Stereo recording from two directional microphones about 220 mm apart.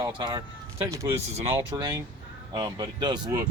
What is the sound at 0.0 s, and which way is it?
Speech, 20° right (ahead or behind).